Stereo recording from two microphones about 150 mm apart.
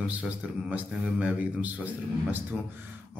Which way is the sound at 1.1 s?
10° right (ahead or behind).